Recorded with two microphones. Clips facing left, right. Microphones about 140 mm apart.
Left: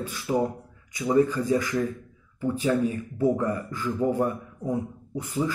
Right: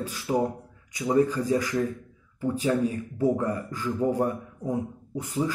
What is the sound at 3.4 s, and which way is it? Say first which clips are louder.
Speech: left 1 dB; 35° right (ahead or behind).